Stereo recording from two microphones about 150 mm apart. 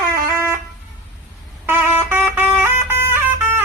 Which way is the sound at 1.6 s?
15° right (ahead or behind).